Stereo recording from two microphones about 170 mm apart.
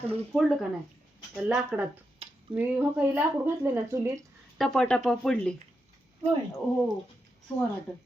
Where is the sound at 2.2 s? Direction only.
35° right (ahead or behind).